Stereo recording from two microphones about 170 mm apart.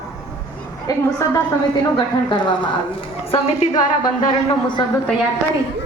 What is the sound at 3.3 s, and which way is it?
Speech, 40° left (ahead or behind).